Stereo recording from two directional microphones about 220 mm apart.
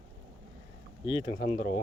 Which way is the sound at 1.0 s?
20° left (ahead or behind).